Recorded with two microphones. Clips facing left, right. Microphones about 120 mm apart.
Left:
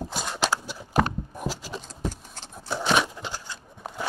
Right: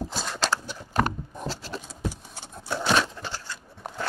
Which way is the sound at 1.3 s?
10° left (ahead or behind).